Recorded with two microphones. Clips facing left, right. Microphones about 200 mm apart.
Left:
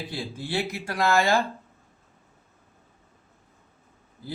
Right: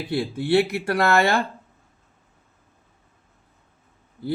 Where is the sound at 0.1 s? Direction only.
65° right (ahead or behind).